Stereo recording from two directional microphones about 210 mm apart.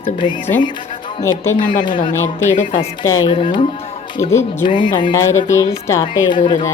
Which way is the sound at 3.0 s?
20° left (ahead or behind).